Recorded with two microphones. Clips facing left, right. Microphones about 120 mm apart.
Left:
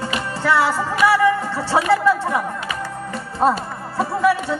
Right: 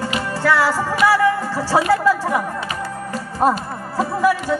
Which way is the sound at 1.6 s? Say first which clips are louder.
Even; 20° left (ahead or behind).